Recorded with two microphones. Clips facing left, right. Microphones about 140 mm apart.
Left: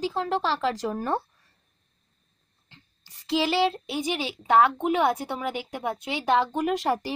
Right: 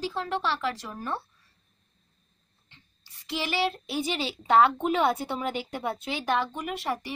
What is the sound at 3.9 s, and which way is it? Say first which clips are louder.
A woman's voice: left 1 dB; 15° left (ahead or behind).